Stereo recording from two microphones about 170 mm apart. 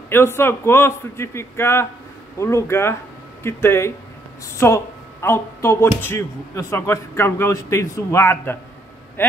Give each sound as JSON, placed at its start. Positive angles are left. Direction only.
{"t": 0.1, "sound": "speech", "side_deg": 15}